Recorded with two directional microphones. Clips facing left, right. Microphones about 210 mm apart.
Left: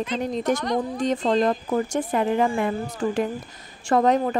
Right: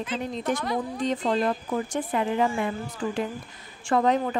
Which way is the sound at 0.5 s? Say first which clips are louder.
Left 4 dB; 5° right (ahead or behind).